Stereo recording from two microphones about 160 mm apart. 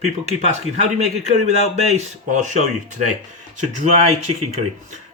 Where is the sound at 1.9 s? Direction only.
45° right (ahead or behind).